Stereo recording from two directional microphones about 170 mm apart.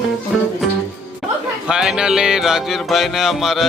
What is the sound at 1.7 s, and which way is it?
Music, 5° right (ahead or behind).